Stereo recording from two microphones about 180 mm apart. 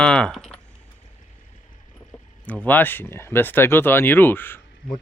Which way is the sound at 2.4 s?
10° left (ahead or behind).